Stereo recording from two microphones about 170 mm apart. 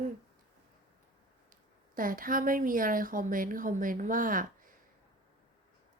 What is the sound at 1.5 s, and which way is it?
A woman's voice, 55° right (ahead or behind).